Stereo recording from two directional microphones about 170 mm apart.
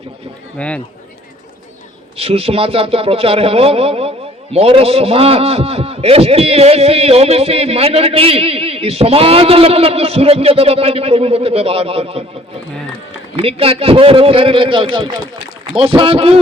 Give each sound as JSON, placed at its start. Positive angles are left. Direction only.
{"t": 0.6, "sound": "speech", "side_deg": 5}
{"t": 2.1, "sound": "a man's voice", "side_deg": -35}
{"t": 13.3, "sound": "a man's voice", "side_deg": -35}